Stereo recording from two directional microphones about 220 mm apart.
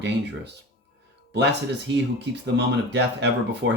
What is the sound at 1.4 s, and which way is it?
Speech, 50° right (ahead or behind).